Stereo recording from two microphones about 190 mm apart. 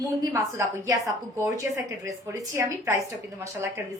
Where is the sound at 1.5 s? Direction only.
15° right (ahead or behind).